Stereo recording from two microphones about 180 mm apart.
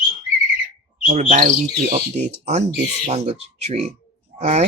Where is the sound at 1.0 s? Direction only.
40° right (ahead or behind).